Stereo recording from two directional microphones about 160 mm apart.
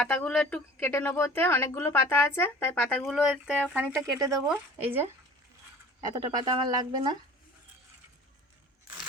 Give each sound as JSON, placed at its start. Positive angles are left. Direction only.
{"t": 0.0, "sound": "speech", "side_deg": 10}
{"t": 3.1, "sound": "speech", "side_deg": -5}
{"t": 3.9, "sound": "speech", "side_deg": -20}
{"t": 6.0, "sound": "speech", "side_deg": -25}